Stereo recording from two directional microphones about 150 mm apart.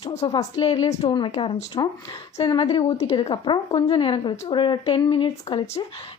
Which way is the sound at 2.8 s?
45° left (ahead or behind).